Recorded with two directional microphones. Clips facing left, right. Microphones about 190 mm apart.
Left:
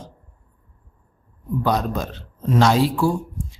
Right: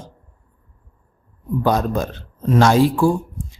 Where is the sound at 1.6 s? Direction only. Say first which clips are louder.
Right 3 dB; 50° right (ahead or behind).